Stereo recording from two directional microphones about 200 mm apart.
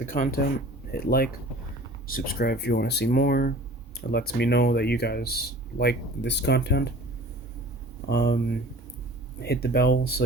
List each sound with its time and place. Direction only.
0.0 s speech: 40° left (ahead or behind); by 6.9 s 60° left (ahead or behind)
8.0 s speech: 55° left (ahead or behind)